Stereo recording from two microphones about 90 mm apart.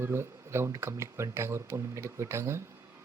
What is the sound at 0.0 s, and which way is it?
Speech, 30° right (ahead or behind).